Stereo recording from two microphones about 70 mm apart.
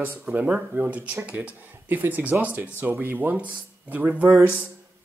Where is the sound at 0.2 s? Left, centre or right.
Right.